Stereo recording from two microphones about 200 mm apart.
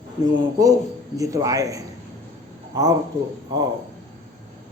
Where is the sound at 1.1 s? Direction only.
15° right (ahead or behind).